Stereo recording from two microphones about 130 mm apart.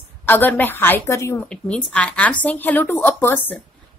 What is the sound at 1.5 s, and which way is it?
A woman's voice, 10° left (ahead or behind).